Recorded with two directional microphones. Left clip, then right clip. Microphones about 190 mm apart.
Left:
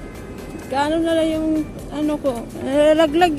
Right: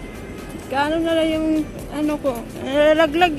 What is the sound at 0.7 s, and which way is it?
Speech, 15° left (ahead or behind).